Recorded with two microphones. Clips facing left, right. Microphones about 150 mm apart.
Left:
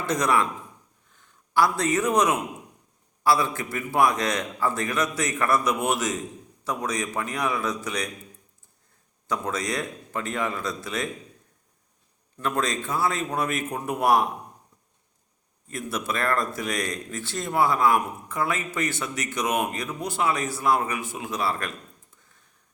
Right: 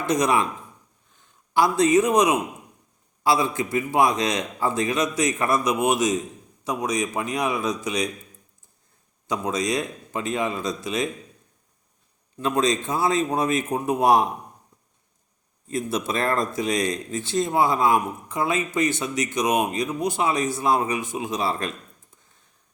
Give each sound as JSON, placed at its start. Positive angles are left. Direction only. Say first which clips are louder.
{"t": 0.0, "sound": "a man's voice", "louder": "right 2 dB", "side_deg": -15}
{"t": 1.5, "sound": "a man's voice", "louder": "right 4 dB", "side_deg": -15}
{"t": 9.2, "sound": "a man's voice", "louder": "right 3 dB", "side_deg": -15}
{"t": 12.4, "sound": "speech", "louder": "right 5 dB", "side_deg": -15}
{"t": 15.7, "sound": "speech", "louder": "right 4 dB", "side_deg": -20}